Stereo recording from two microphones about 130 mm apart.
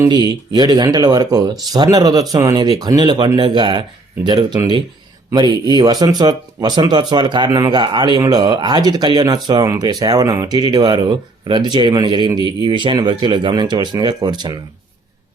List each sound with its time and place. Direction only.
0.1 s speech: 30° right (ahead or behind)